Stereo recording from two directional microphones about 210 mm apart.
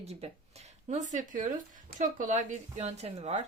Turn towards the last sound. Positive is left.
turn(degrees=-30)  # may be behind; listen again after turning